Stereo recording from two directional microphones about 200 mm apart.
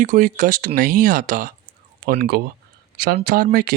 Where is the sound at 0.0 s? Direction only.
40° right (ahead or behind).